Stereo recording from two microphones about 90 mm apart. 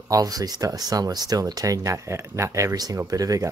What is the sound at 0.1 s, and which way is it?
Speech, 45° right (ahead or behind).